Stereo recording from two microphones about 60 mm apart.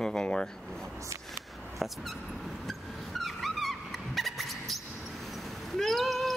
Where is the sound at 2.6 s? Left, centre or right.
Centre.